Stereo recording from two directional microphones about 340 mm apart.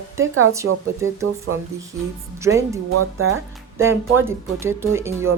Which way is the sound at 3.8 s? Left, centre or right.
Centre.